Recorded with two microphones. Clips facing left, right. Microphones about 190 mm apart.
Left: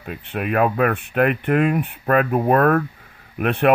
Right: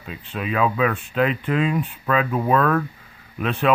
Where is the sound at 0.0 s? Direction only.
60° left (ahead or behind).